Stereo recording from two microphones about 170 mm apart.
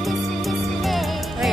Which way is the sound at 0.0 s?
Centre (ahead or behind).